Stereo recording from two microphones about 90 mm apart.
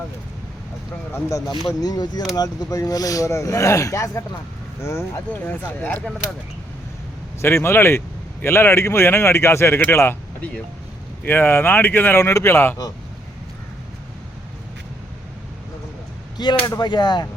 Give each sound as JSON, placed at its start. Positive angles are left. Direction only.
{"t": 1.1, "sound": "a man's voice", "side_deg": 40}
{"t": 7.4, "sound": "a man's voice", "side_deg": 25}
{"t": 11.2, "sound": "a man's voice", "side_deg": 20}
{"t": 16.6, "sound": "speech", "side_deg": 50}